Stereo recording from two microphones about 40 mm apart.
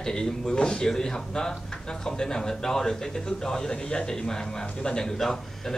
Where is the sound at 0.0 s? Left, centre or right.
Centre.